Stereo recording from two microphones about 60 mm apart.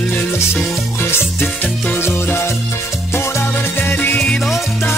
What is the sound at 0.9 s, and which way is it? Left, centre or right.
Music, left.